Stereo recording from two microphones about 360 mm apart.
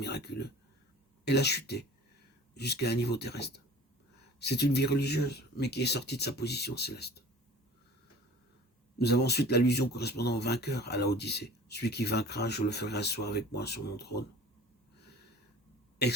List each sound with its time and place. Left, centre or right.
0.0 s speech: left
9.0 s speech: left